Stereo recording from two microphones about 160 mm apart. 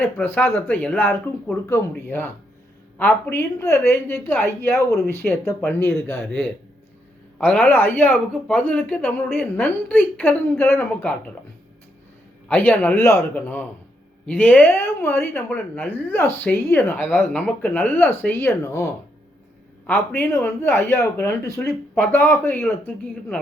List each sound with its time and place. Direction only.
0.0 s speech: 10° left (ahead or behind)
12.5 s speech: 10° left (ahead or behind)
19.9 s speech: 15° left (ahead or behind)